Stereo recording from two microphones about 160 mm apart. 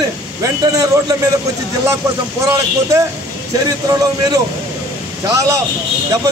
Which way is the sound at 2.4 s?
20° right (ahead or behind).